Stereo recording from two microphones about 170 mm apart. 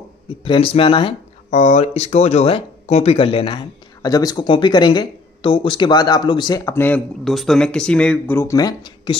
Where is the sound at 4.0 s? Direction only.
20° left (ahead or behind).